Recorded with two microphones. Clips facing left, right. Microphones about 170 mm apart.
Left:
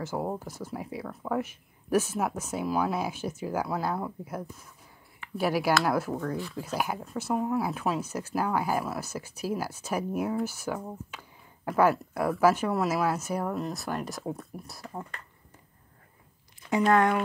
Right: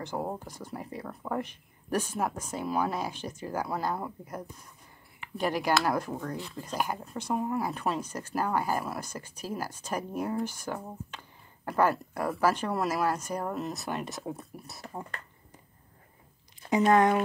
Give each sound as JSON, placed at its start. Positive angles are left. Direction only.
{"t": 0.0, "sound": "speech", "side_deg": 5}
{"t": 16.7, "sound": "speech", "side_deg": -20}